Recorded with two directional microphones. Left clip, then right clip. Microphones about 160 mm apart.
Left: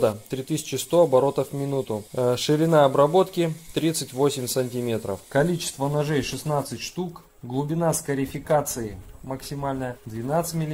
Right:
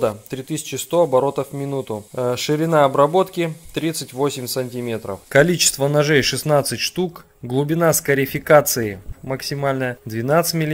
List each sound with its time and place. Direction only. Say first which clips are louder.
0.0 s speech: right 2 dB; centre (ahead or behind)
5.5 s speech: right 9 dB; 35° right (ahead or behind)